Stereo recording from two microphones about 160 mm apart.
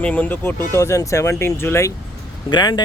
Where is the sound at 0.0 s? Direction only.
10° left (ahead or behind).